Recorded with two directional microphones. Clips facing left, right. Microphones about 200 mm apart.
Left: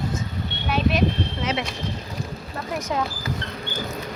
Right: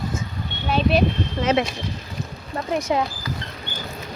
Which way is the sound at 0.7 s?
35° right (ahead or behind).